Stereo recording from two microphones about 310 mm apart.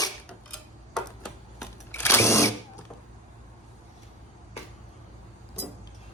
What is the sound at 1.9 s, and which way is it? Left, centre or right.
Drill, centre.